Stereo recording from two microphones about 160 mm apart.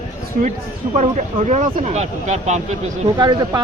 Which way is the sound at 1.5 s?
45° right (ahead or behind).